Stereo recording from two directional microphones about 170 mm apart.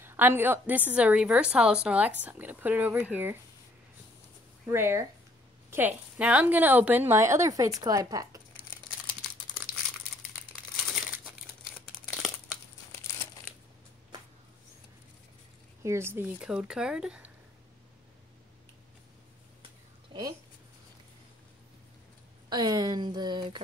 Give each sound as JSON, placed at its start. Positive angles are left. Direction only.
{"t": 0.0, "sound": "a woman's voice", "side_deg": -15}
{"t": 4.6, "sound": "a woman's voice", "side_deg": -15}
{"t": 12.2, "sound": "crumpling", "side_deg": 0}
{"t": 15.8, "sound": "a woman's voice", "side_deg": -15}
{"t": 20.1, "sound": "a sound", "side_deg": -20}
{"t": 22.5, "sound": "speech", "side_deg": -20}